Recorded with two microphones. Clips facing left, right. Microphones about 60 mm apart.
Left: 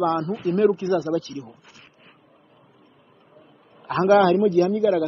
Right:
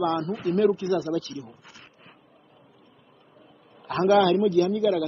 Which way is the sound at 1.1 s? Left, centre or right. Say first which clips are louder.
Left 3 dB; left.